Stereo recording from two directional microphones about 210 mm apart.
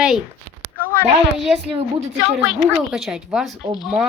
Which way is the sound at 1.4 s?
Centre (ahead or behind).